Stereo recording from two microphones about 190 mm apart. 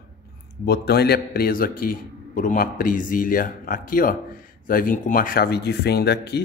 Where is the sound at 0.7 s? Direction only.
55° left (ahead or behind).